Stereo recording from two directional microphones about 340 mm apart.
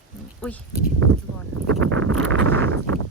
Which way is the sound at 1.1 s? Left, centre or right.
Right.